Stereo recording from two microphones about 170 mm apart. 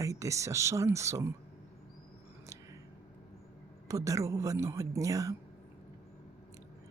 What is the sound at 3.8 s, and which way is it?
Speech, 20° right (ahead or behind).